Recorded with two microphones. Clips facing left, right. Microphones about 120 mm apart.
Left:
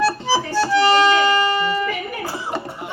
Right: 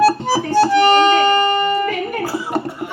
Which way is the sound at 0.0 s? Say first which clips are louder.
Right 5 dB; 50° right (ahead or behind).